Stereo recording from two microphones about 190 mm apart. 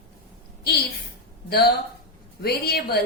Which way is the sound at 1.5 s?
55° left (ahead or behind).